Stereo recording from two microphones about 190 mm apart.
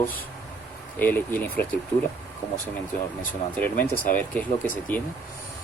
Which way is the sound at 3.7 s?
45° left (ahead or behind).